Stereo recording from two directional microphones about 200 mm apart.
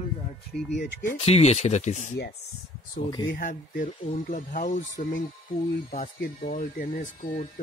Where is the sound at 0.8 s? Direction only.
45° left (ahead or behind).